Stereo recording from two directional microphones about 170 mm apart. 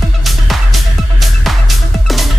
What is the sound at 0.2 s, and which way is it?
Music, centre (ahead or behind).